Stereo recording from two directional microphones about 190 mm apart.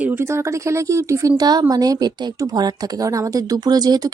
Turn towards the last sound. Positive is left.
turn(degrees=-20)  # may be behind; listen again after turning